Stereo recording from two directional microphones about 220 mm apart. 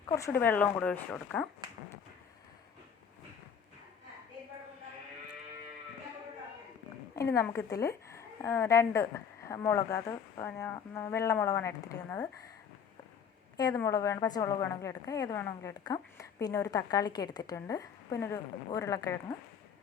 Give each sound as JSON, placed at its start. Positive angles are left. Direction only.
{"t": 0.1, "sound": "a woman's voice", "side_deg": 10}
{"t": 7.2, "sound": "a woman's voice", "side_deg": 10}
{"t": 13.6, "sound": "a woman's voice", "side_deg": 15}